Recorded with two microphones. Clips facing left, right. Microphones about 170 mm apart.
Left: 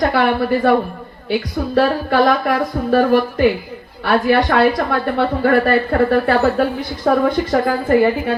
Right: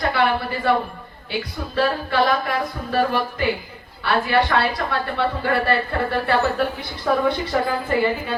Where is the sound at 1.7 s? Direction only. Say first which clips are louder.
Left 5 dB; 50° left (ahead or behind).